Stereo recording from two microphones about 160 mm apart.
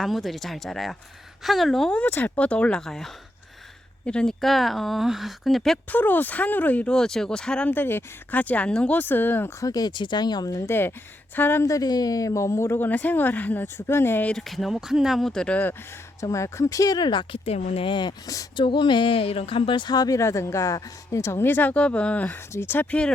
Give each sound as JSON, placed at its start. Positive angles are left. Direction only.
{"t": 0.0, "sound": "speech", "side_deg": 0}
{"t": 16.2, "sound": "speech", "side_deg": 20}